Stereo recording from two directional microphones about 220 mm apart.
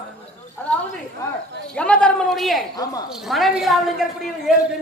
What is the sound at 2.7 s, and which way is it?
Speech, 15° left (ahead or behind).